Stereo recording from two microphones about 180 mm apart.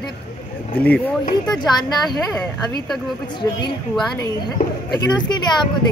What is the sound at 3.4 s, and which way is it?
Speech, 15° left (ahead or behind).